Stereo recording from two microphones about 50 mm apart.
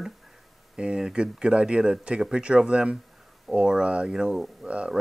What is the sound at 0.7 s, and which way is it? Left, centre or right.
Speech, centre.